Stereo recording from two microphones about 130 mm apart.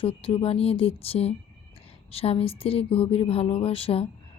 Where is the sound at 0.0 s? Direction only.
45° left (ahead or behind).